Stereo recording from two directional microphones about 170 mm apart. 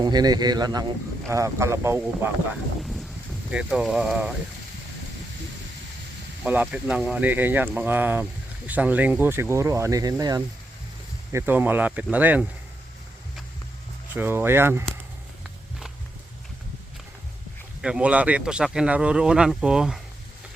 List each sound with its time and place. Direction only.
0.0 s a man's voice: 25° right (ahead or behind)
3.5 s speech: 5° right (ahead or behind)
6.4 s speech: 10° right (ahead or behind)
14.1 s speech: 15° right (ahead or behind)
17.8 s speech: 5° right (ahead or behind)